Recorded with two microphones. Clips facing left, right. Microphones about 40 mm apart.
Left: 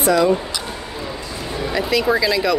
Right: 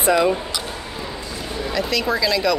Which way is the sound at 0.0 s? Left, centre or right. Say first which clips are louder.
Left 1 dB; centre.